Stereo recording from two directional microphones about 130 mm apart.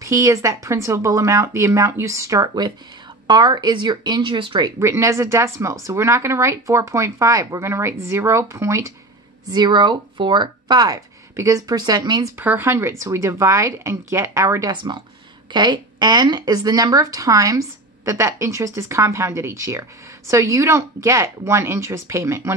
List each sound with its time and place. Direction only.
0.0 s speech: 25° right (ahead or behind)
9.5 s speech: 35° right (ahead or behind)
12.4 s speech: 15° right (ahead or behind)